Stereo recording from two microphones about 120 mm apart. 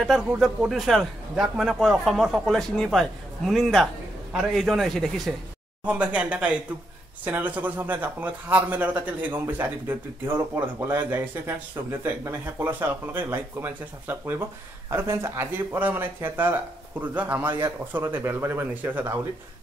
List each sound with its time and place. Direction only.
0.0 s speech: centre (ahead or behind)
5.9 s speech: 10° right (ahead or behind)